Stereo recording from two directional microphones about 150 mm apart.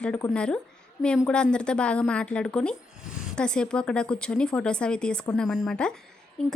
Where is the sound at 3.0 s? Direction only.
5° right (ahead or behind).